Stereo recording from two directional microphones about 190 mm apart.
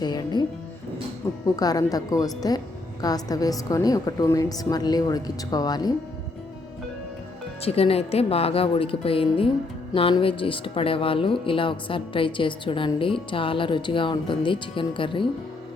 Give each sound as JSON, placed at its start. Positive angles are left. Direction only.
{"t": 0.0, "sound": "speech", "side_deg": 20}
{"t": 1.5, "sound": "speech", "side_deg": 20}
{"t": 7.6, "sound": "speech", "side_deg": 30}